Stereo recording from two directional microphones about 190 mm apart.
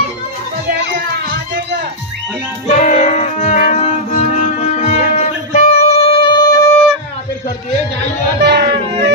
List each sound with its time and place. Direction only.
0.7 s music: 55° right (ahead or behind)
2.8 s music: 40° left (ahead or behind); by 6.8 s 15° left (ahead or behind)
8.4 s a sound: 60° right (ahead or behind)